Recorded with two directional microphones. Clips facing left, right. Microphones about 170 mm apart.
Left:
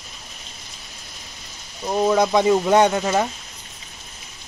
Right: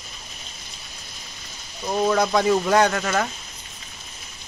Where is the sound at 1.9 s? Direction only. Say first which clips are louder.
Left 2 dB; 15° left (ahead or behind).